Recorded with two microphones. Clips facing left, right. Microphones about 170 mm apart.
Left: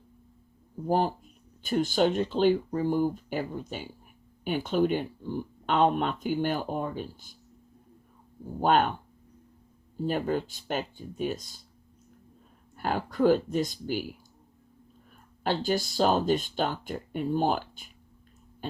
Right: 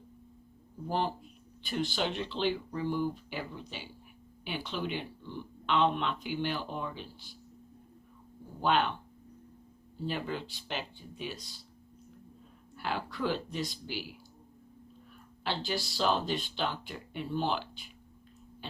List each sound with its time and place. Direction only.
0.9 s speech: 45° left (ahead or behind)
8.6 s speech: 45° left (ahead or behind)
10.0 s speech: 45° left (ahead or behind)
12.7 s speech: 45° left (ahead or behind)
15.4 s speech: 45° left (ahead or behind)